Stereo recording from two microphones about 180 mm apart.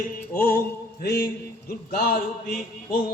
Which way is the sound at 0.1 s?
55° left (ahead or behind).